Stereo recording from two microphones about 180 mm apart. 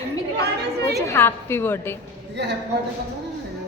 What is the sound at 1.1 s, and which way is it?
Speech, 15° left (ahead or behind).